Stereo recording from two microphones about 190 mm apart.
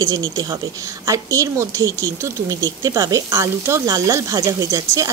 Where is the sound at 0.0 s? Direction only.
20° right (ahead or behind).